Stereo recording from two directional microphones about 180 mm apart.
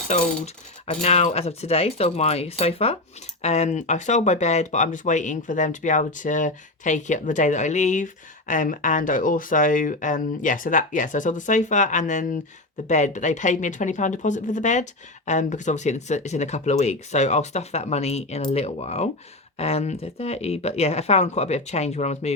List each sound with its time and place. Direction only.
0.1 s speech: 40° left (ahead or behind)